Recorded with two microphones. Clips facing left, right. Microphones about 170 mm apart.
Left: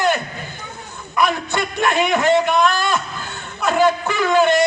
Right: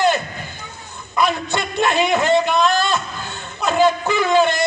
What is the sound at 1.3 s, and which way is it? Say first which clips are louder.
A man's voice: even; 25° right (ahead or behind).